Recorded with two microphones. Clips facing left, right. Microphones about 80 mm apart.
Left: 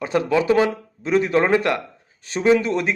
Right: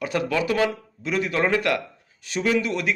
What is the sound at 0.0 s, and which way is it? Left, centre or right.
A man's voice, left.